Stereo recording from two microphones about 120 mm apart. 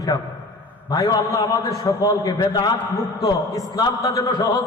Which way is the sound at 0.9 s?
30° left (ahead or behind).